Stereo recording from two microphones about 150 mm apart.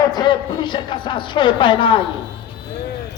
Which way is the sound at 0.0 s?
30° left (ahead or behind).